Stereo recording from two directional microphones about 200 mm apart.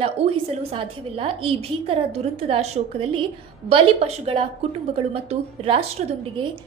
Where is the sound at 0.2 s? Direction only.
30° right (ahead or behind).